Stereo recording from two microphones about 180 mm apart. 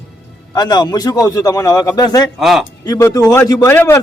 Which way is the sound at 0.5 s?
20° left (ahead or behind).